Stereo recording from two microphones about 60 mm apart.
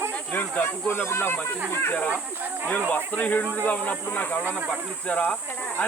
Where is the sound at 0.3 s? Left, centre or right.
Left.